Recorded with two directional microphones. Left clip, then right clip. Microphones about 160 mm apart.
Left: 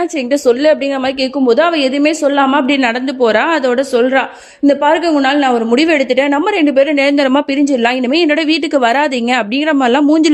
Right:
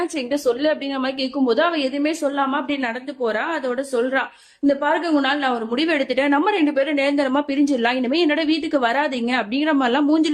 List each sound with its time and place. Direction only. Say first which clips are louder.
0.4 s a woman's voice: left 10 dB; 50° left (ahead or behind)